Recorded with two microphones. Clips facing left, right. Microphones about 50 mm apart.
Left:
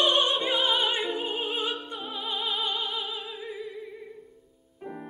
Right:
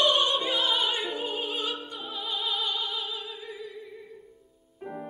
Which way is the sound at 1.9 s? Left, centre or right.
Centre.